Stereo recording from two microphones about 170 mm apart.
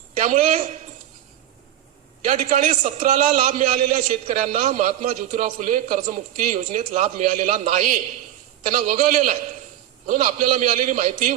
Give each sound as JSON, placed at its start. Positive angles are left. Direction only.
{"t": 0.2, "sound": "a man's voice", "side_deg": -45}
{"t": 2.2, "sound": "a man's voice", "side_deg": -45}